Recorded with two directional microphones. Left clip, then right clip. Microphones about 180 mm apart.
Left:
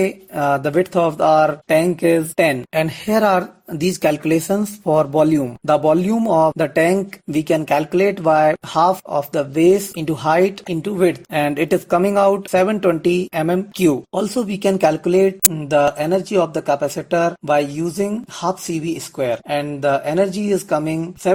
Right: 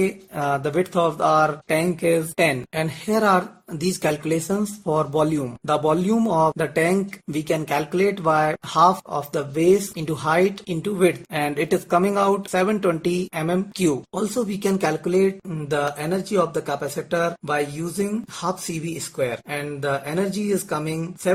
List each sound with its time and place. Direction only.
0.0 s speech: 30° left (ahead or behind)